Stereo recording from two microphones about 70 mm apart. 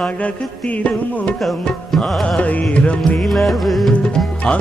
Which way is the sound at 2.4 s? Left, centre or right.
Centre.